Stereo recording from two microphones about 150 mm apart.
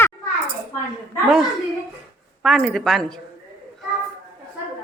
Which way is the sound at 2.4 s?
Centre (ahead or behind).